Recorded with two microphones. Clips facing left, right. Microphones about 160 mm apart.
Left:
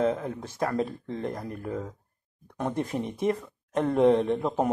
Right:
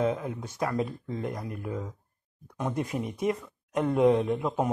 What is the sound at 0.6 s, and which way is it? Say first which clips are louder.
Speech: left 2 dB; 40° left (ahead or behind).